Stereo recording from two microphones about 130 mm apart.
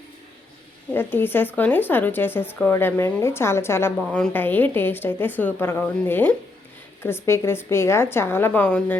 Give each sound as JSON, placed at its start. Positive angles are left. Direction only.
{"t": 0.9, "sound": "a woman's voice", "side_deg": 15}